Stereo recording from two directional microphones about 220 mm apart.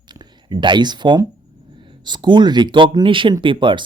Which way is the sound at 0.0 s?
20° right (ahead or behind).